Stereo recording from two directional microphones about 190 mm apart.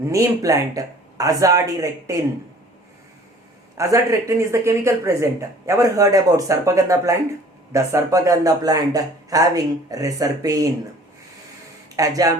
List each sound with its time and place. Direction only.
0.1 s speech: 15° right (ahead or behind)
3.8 s speech: 15° right (ahead or behind)
11.9 s speech: 20° right (ahead or behind)